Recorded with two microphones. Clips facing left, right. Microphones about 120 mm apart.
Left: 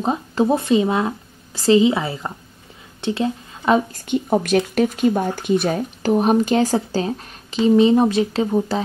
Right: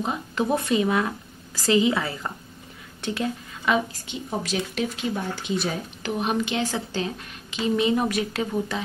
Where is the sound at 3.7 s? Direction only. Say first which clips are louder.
Left 11 dB; 50° left (ahead or behind); by 8.8 s 30° left (ahead or behind).